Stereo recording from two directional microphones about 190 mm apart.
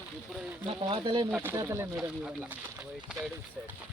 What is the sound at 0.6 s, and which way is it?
Speech, 25° right (ahead or behind).